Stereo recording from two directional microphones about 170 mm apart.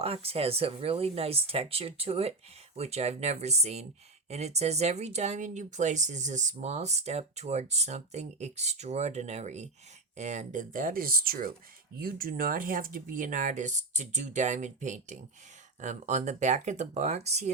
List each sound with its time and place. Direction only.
0.0 s speech: 35° right (ahead or behind)